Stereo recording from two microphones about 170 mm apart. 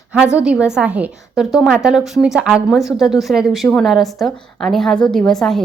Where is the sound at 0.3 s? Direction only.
5° right (ahead or behind).